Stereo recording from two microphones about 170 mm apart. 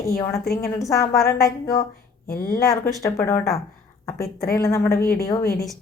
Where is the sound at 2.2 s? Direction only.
65° left (ahead or behind).